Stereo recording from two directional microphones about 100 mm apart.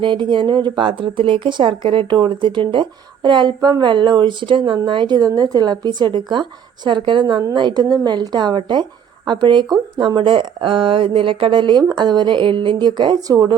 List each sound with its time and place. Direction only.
0.0 s speech: 55° right (ahead or behind)